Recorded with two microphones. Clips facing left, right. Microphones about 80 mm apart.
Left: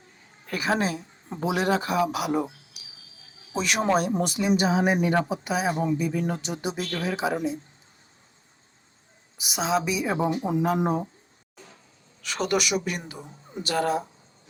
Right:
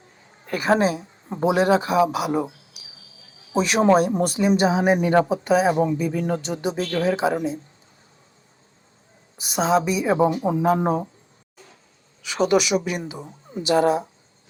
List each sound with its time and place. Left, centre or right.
0.4 s speech: right
9.6 s speech: right
12.2 s speech: centre
13.7 s speech: right